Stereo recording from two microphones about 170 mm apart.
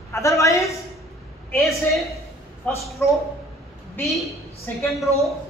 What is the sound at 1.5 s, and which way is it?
A woman's voice, centre (ahead or behind).